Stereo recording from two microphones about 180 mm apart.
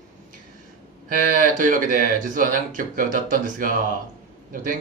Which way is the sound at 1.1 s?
50° right (ahead or behind).